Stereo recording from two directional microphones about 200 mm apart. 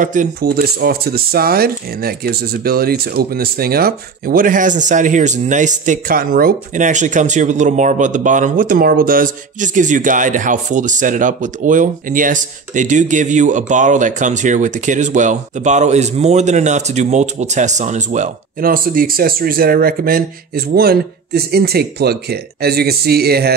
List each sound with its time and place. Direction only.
0.0 s speech: 40° right (ahead or behind)